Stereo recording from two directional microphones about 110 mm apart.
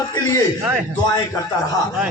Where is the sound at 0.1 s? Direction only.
35° left (ahead or behind).